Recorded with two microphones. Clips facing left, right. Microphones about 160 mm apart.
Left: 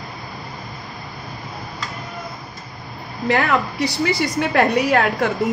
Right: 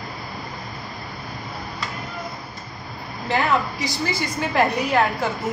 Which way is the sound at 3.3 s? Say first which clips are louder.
Left 1 dB; 70° left (ahead or behind).